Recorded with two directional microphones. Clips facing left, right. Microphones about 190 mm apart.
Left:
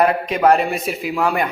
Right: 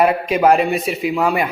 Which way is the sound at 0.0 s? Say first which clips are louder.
Right 1 dB; 5° right (ahead or behind).